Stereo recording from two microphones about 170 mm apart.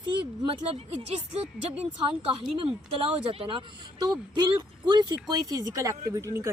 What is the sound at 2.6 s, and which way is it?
A woman's voice, 35° right (ahead or behind).